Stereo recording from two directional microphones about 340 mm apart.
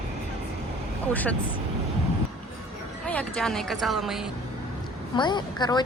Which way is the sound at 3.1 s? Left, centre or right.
Centre.